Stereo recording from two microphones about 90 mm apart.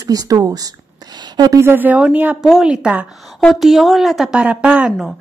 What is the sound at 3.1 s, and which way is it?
A woman's voice, centre (ahead or behind).